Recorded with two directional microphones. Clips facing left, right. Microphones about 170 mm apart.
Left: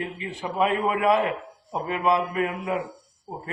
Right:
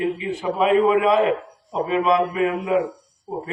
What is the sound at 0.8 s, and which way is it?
A man's voice, 20° right (ahead or behind).